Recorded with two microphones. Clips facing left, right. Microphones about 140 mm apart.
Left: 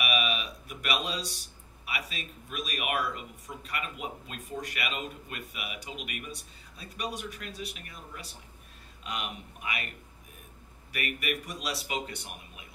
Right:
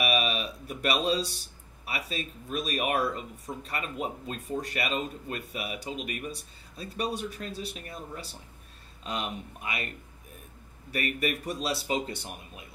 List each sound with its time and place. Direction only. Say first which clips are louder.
0.0 s a sound: right 3 dB; 35° right (ahead or behind)
1.9 s speech: right 3 dB; 35° right (ahead or behind)
10.9 s speech: right 4 dB; 35° right (ahead or behind)